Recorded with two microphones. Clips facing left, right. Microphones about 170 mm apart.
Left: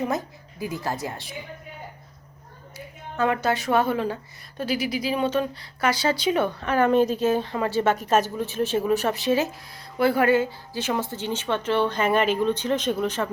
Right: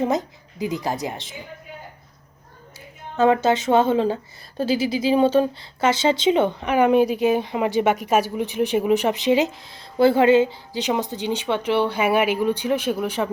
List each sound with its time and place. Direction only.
0.0 s speech: 20° right (ahead or behind)
2.7 s speech: 25° right (ahead or behind)